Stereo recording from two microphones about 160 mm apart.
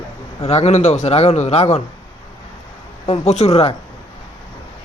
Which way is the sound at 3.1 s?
45° left (ahead or behind).